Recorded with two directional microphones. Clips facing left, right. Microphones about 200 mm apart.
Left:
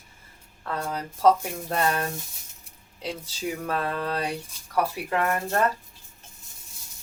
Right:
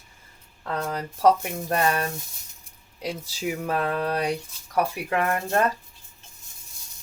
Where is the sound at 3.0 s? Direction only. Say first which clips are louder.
Right 2 dB; 10° right (ahead or behind).